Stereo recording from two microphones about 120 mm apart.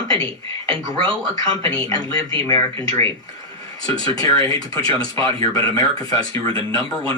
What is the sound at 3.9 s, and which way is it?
Speech, 45° right (ahead or behind).